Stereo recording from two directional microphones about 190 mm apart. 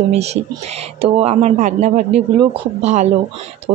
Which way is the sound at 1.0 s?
30° right (ahead or behind).